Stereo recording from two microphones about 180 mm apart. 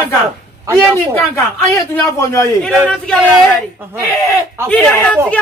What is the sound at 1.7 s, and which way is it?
Speech, 15° left (ahead or behind).